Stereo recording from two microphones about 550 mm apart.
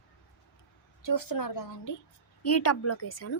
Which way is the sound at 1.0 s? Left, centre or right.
Left.